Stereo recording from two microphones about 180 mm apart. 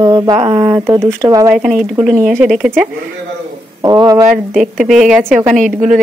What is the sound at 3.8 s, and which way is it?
Speech, 20° right (ahead or behind).